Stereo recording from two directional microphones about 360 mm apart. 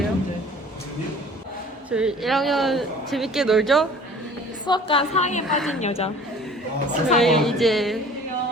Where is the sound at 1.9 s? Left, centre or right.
Centre.